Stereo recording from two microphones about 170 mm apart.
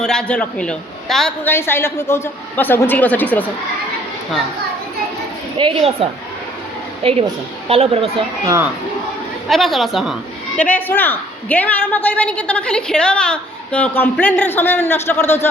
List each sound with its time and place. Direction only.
0.0 s a man's voice: 5° left (ahead or behind)
1.5 s a woman's voice: 15° left (ahead or behind)
5.5 s a woman's voice: 30° right (ahead or behind)
9.5 s a man's voice: centre (ahead or behind)
10.6 s a woman's voice: 10° left (ahead or behind)